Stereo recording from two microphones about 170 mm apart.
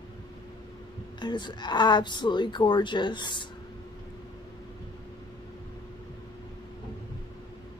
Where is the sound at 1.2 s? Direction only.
25° left (ahead or behind).